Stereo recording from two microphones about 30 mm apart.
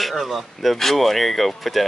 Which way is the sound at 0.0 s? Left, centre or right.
Centre.